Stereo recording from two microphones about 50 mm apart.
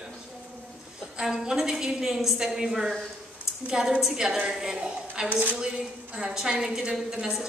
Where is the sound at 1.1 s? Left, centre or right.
Centre.